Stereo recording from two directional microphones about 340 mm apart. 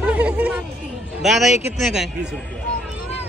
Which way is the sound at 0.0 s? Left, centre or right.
Centre.